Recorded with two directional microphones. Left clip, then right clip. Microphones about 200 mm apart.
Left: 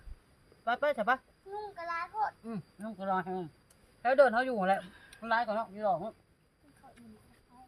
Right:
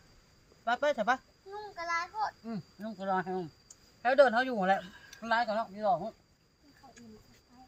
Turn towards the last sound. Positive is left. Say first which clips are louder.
# right 1 dB
turn(degrees=5)  # may be behind; listen again after turning